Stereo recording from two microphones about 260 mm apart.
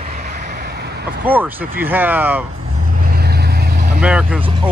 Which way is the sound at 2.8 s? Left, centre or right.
Right.